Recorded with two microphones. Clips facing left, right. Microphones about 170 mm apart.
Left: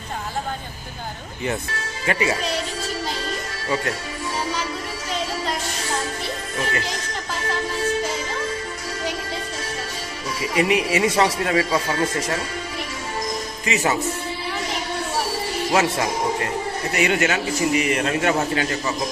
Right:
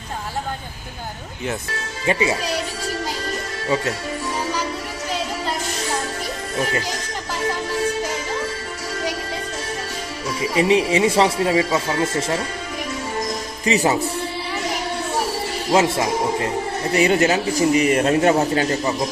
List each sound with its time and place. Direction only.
2.0 s speech: 20° right (ahead or behind)
10.5 s speech: 25° right (ahead or behind)
13.7 s a man's voice: 35° right (ahead or behind)
15.7 s a man's voice: 25° right (ahead or behind)